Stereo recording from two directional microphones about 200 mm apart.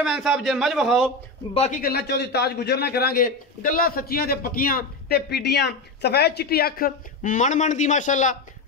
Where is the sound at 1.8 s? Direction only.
55° left (ahead or behind).